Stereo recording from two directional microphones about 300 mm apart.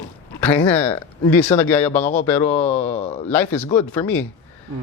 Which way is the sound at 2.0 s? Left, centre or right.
Left.